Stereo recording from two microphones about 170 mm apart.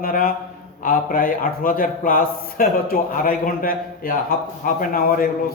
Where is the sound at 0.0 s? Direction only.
55° left (ahead or behind).